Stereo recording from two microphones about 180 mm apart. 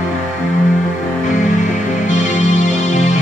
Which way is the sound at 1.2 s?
45° left (ahead or behind).